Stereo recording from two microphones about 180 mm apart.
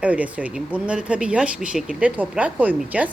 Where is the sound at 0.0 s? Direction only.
10° right (ahead or behind).